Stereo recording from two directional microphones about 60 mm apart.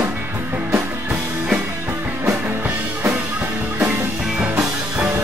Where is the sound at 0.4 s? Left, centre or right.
Right.